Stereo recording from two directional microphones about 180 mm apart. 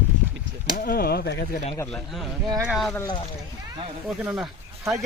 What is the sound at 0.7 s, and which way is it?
Speech, 55° left (ahead or behind).